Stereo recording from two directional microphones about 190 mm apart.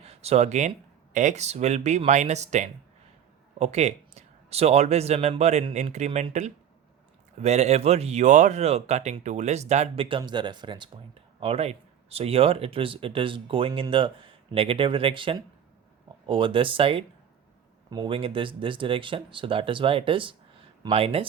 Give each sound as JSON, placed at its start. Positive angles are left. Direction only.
{"t": 0.1, "sound": "speech", "side_deg": -35}